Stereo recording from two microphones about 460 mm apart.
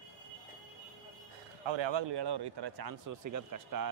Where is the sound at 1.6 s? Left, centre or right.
Right.